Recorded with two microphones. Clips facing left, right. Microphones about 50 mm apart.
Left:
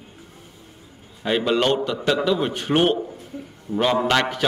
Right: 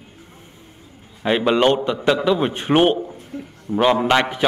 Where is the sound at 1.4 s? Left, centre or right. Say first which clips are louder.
Right 4 dB; right.